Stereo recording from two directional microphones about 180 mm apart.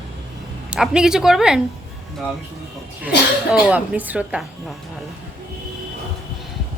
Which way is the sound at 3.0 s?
5° right (ahead or behind).